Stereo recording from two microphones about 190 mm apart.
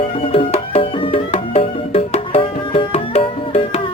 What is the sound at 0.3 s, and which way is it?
Music, 30° left (ahead or behind).